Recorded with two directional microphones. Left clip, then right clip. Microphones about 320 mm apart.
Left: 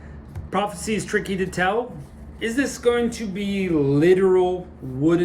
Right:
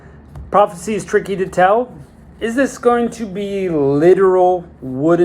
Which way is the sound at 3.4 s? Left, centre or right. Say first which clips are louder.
Right 7 dB; right.